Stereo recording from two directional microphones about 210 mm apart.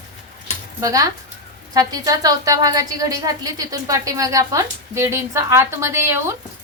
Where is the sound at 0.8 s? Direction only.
15° right (ahead or behind).